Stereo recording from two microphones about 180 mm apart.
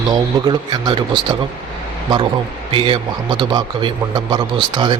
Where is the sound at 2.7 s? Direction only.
30° right (ahead or behind).